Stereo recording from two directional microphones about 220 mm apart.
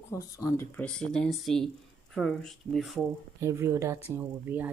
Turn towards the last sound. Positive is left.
turn(degrees=-10)  # may be behind; listen again after turning